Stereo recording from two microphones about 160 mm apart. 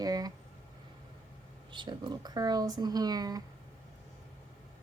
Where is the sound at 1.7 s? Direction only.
30° right (ahead or behind).